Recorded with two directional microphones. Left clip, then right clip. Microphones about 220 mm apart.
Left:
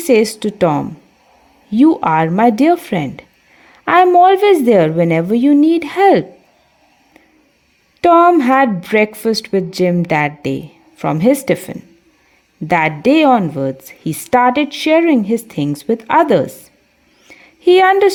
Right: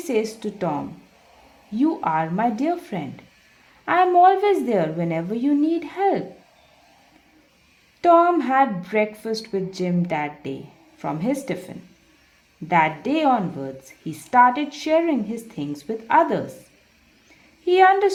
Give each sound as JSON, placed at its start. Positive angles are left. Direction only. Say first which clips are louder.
{"t": 0.0, "sound": "a woman's voice", "louder": "left 12 dB", "side_deg": 45}
{"t": 8.0, "sound": "a woman's voice", "louder": "left 7 dB", "side_deg": 40}
{"t": 17.7, "sound": "a woman's voice", "louder": "left 6 dB", "side_deg": 45}